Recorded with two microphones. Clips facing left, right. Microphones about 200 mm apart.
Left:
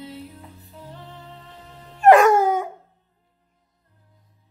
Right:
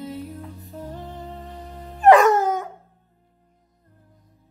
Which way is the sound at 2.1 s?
Centre (ahead or behind).